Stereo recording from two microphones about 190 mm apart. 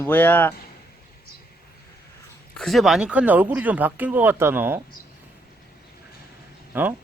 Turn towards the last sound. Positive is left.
turn(degrees=-10)  # may be behind; listen again after turning